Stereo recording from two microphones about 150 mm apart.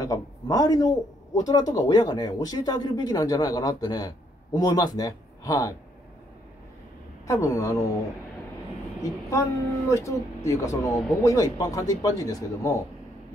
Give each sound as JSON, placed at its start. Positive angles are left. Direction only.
{"t": 0.0, "sound": "speech", "side_deg": 25}
{"t": 7.2, "sound": "speech", "side_deg": 20}
{"t": 9.0, "sound": "speech", "side_deg": 20}